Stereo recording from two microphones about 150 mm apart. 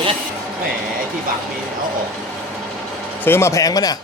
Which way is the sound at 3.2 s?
15° left (ahead or behind).